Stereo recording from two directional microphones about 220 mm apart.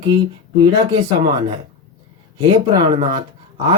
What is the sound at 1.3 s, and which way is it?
Speech, 20° right (ahead or behind).